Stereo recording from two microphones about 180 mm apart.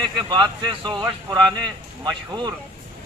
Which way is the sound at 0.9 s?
20° right (ahead or behind).